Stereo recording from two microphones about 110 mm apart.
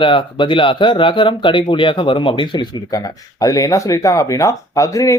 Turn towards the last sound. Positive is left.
turn(degrees=30)  # may be behind; listen again after turning